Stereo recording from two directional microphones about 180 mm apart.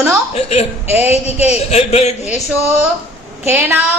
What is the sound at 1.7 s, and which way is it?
Speech, 35° left (ahead or behind).